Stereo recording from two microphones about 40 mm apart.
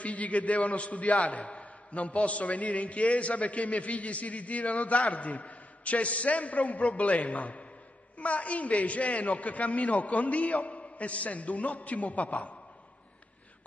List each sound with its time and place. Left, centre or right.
0.0 s a man's voice: left